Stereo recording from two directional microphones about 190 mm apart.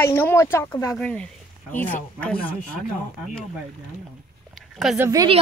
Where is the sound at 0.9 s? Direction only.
5° left (ahead or behind).